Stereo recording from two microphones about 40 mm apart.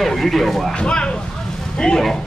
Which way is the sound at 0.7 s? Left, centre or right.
Left.